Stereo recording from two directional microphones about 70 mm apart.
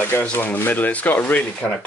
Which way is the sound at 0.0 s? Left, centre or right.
Left.